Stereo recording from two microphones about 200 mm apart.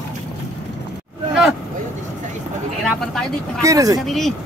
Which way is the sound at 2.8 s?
Centre (ahead or behind).